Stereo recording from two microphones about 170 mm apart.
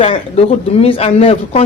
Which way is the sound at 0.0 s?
35° left (ahead or behind).